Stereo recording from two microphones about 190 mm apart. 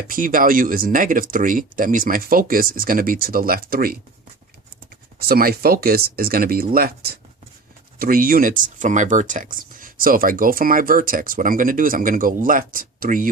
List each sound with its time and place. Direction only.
0.1 s speech: 45° right (ahead or behind)
5.3 s speech: 50° right (ahead or behind)